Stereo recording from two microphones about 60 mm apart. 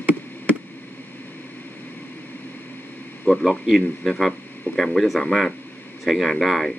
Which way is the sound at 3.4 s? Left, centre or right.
Centre.